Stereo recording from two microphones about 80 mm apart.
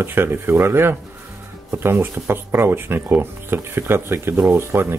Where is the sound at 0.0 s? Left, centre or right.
Right.